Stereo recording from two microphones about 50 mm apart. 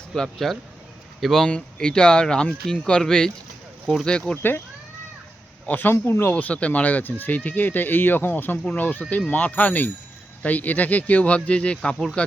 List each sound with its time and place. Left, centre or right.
0.1 s speech: centre
1.5 s speech: centre
5.6 s speech: left
5.9 s speech: left
6.3 s speech: left